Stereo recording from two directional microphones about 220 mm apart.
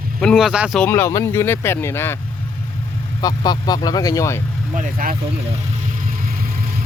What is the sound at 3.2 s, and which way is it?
Speech, 15° left (ahead or behind).